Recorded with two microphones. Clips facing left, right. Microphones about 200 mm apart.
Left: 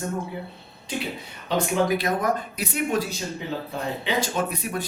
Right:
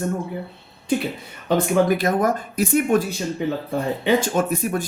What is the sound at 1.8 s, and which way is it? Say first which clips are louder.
Speech: right 4 dB; 45° right (ahead or behind).